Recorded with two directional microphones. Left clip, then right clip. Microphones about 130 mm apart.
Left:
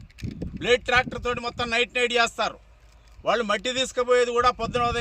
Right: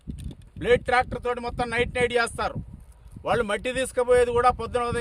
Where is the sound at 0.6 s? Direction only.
40° right (ahead or behind).